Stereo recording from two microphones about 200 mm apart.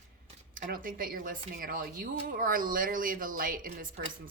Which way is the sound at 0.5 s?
45° right (ahead or behind).